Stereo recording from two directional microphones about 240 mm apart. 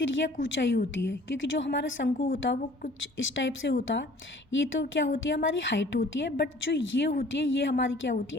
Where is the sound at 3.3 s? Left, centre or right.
Left.